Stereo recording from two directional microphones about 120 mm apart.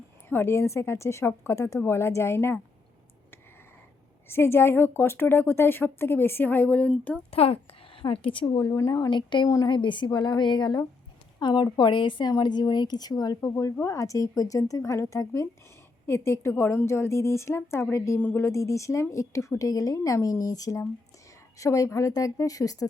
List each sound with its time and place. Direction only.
0.3 s a woman's voice: 20° left (ahead or behind)
4.3 s a woman's voice: 20° left (ahead or behind)
7.3 s a woman's voice: 55° left (ahead or behind)
8.4 s a woman's voice: 30° left (ahead or behind)